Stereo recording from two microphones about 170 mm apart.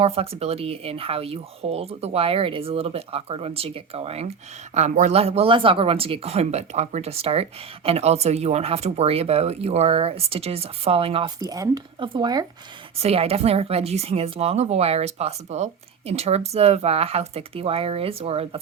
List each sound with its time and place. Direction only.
0.0 s speech: 35° right (ahead or behind)
11.3 s speech: 20° right (ahead or behind)
13.0 s speech: 35° right (ahead or behind)